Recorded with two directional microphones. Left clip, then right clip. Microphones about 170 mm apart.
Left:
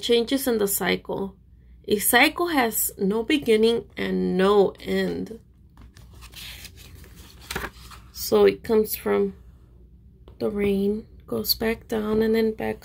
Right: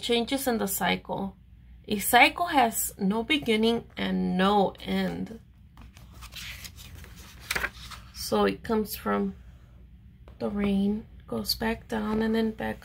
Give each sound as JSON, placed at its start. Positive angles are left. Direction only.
{"t": 0.0, "sound": "a woman's voice", "side_deg": 20}
{"t": 7.5, "sound": "a sound", "side_deg": -15}
{"t": 8.2, "sound": "a woman's voice", "side_deg": 25}
{"t": 10.3, "sound": "a woman's voice", "side_deg": 25}